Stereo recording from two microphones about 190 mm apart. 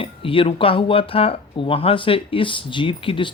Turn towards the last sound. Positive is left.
turn(degrees=25)  # may be behind; listen again after turning